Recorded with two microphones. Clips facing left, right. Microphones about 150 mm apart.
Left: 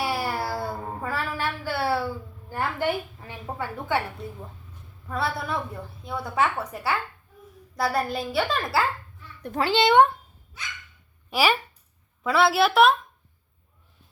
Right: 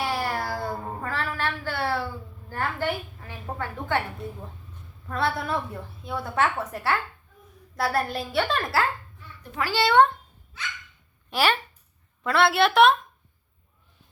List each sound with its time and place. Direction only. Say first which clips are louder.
0.0 s cat: even; 10° left (ahead or behind)
1.0 s a sound: left 1 dB; 10° left (ahead or behind)
2.5 s a woman's voice: left 2 dB; 15° left (ahead or behind)
9.6 s a woman's voice: left 2 dB; 20° left (ahead or behind); by 13.0 s centre (ahead or behind)